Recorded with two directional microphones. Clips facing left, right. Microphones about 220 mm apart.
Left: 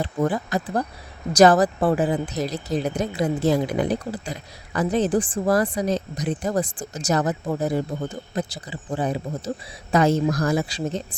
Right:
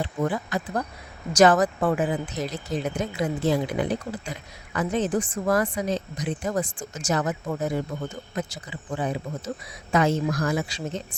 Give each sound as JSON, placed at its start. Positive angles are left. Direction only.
{"t": 0.0, "sound": "speech", "side_deg": 40}